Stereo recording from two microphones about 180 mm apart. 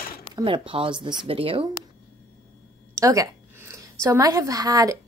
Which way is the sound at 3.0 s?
20° right (ahead or behind).